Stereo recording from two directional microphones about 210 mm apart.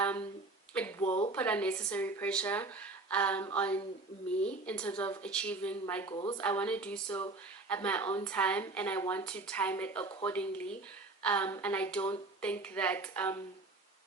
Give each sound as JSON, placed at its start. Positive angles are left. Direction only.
{"t": 0.0, "sound": "a sound", "side_deg": 5}
{"t": 1.3, "sound": "speech", "side_deg": 5}
{"t": 6.1, "sound": "a woman's voice", "side_deg": 25}
{"t": 6.3, "sound": "speech", "side_deg": 5}